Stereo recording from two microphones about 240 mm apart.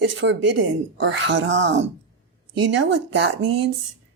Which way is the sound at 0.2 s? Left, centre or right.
Right.